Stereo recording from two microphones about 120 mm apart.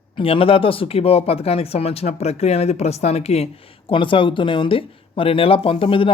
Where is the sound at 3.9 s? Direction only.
45° left (ahead or behind).